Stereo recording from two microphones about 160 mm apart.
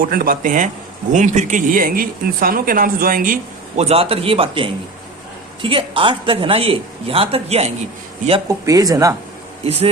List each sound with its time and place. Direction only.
0.0 s speech: 65° right (ahead or behind)
3.8 s speech: 40° right (ahead or behind)
8.4 s speech: 20° right (ahead or behind)
9.6 s speech: 40° right (ahead or behind)